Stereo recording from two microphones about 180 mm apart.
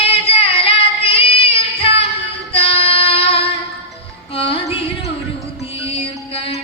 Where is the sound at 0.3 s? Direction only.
30° left (ahead or behind).